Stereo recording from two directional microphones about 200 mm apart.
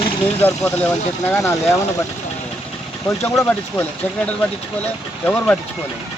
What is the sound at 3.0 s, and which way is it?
Speech, 10° left (ahead or behind).